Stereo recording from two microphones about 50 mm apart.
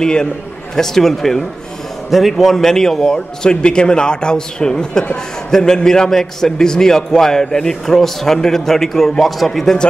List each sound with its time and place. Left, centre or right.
0.0 s a man's voice: centre
3.6 s a man's voice: centre